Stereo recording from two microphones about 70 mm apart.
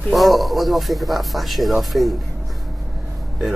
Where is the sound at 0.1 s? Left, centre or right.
Centre.